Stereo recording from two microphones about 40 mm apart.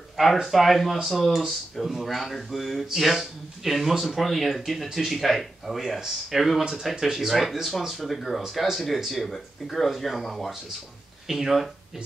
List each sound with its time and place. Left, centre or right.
0.2 s speech: centre
5.8 s speech: centre